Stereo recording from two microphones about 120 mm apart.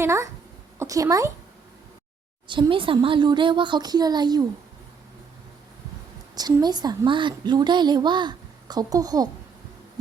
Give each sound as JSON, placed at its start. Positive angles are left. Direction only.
{"t": 0.0, "sound": "speech", "side_deg": -25}
{"t": 2.5, "sound": "a woman's voice", "side_deg": -45}
{"t": 6.3, "sound": "a woman's voice", "side_deg": -35}